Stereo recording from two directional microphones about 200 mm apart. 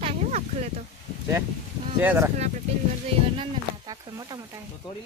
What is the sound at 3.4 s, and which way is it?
Speech, 20° right (ahead or behind).